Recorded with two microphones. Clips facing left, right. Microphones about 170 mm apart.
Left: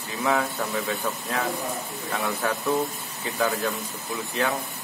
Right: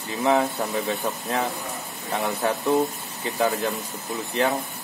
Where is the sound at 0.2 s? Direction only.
20° right (ahead or behind).